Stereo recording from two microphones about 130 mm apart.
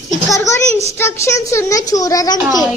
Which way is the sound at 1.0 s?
20° left (ahead or behind).